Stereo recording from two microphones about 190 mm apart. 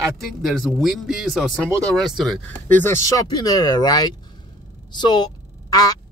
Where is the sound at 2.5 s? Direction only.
10° left (ahead or behind).